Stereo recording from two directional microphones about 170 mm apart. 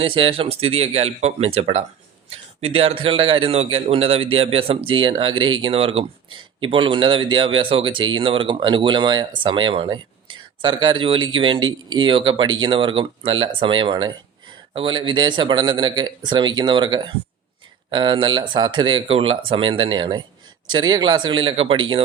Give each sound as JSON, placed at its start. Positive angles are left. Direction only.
{"t": 0.0, "sound": "speech", "side_deg": -30}